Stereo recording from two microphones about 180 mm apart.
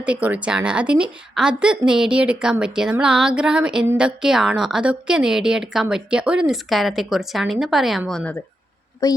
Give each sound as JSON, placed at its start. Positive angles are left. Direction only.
{"t": 0.0, "sound": "a woman's voice", "side_deg": -5}
{"t": 9.0, "sound": "a woman's voice", "side_deg": 20}